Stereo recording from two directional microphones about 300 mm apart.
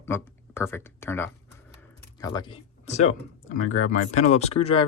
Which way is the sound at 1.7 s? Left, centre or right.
Centre.